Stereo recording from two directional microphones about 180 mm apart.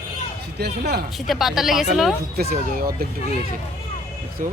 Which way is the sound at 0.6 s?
65° right (ahead or behind).